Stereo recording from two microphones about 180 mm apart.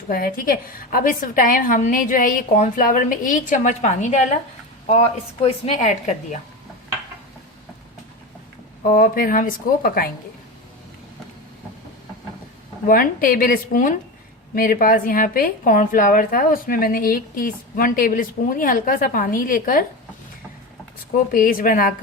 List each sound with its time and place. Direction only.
0.1 s a woman's voice: 55° left (ahead or behind)
5.4 s a woman's voice: 35° left (ahead or behind)
8.9 s a woman's voice: 50° left (ahead or behind)
12.9 s a woman's voice: 50° left (ahead or behind)
21.3 s a woman's voice: 50° left (ahead or behind)